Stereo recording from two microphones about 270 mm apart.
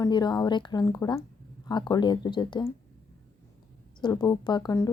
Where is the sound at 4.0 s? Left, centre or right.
Centre.